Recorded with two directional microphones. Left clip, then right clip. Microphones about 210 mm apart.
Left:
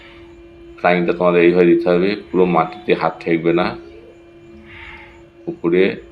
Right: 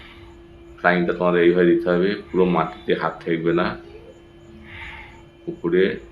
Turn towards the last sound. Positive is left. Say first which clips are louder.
# left 4 dB
turn(degrees=20)  # may be behind; listen again after turning